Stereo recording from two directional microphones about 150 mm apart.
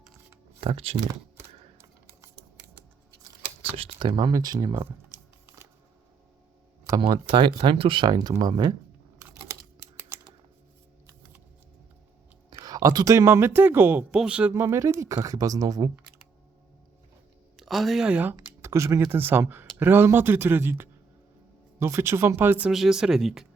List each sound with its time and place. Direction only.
0.6 s speech: 40° right (ahead or behind)
1.8 s typing: 15° right (ahead or behind)
3.6 s speech: 35° right (ahead or behind); by 4.9 s 20° right (ahead or behind)
7.0 s speech: 35° right (ahead or behind)
9.1 s computer keyboard: 20° right (ahead or behind)
12.5 s speech: 25° right (ahead or behind); by 14.5 s 5° right (ahead or behind)
14.5 s speech: 20° right (ahead or behind)
17.6 s speech: centre (ahead or behind)
18.3 s a sound: 20° right (ahead or behind)
19.1 s speech: 15° right (ahead or behind)